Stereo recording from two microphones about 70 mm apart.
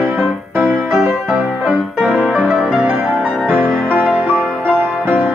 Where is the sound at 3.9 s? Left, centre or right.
Right.